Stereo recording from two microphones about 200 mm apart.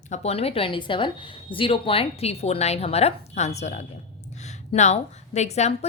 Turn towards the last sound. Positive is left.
turn(degrees=35)  # may be behind; listen again after turning